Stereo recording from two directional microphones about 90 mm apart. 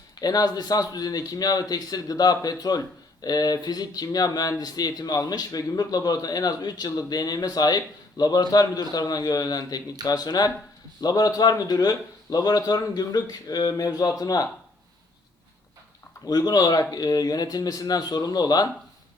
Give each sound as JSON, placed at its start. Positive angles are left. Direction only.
{"t": 0.2, "sound": "speech", "side_deg": 45}
{"t": 16.2, "sound": "speech", "side_deg": 45}